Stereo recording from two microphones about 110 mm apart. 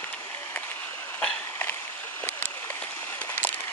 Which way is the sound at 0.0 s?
15° left (ahead or behind).